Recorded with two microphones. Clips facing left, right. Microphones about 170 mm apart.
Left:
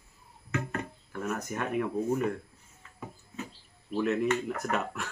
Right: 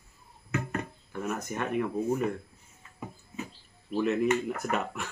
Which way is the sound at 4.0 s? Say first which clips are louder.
Right 1 dB; centre (ahead or behind).